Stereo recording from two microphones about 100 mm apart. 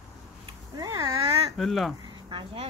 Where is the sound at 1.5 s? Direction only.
5° left (ahead or behind).